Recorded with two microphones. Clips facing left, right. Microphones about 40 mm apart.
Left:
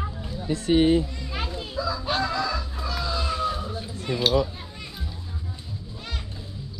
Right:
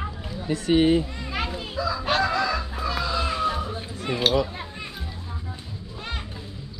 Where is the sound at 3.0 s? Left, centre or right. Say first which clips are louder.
Right 1 dB; right.